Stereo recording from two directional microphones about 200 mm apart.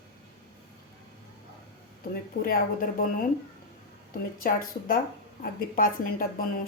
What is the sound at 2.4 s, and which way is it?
Speech, 45° left (ahead or behind).